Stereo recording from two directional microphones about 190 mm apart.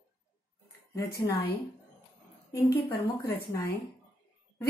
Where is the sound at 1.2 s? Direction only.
15° left (ahead or behind).